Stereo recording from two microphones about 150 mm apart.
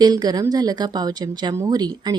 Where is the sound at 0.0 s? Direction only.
25° right (ahead or behind).